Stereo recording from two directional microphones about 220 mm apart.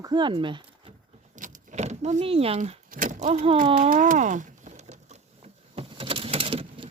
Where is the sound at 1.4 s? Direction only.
35° right (ahead or behind).